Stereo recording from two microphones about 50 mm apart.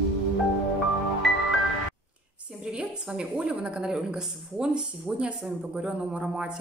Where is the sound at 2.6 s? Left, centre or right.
Right.